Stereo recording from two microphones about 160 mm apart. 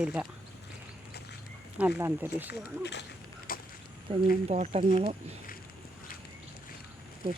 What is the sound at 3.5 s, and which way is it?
Vehicle, 65° left (ahead or behind).